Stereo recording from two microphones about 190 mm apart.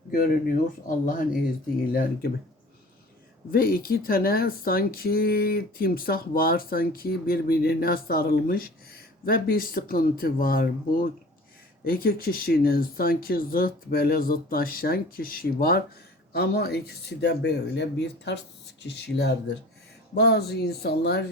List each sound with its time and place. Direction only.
0.1 s speech: 50° left (ahead or behind)
3.5 s speech: 50° left (ahead or behind)